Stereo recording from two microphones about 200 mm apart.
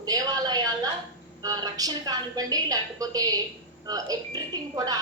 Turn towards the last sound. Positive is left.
turn(degrees=-20)  # may be behind; listen again after turning